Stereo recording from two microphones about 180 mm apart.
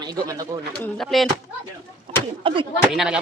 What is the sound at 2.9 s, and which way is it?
Speech, 5° right (ahead or behind).